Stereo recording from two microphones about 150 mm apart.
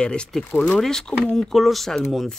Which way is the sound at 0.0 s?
5° left (ahead or behind).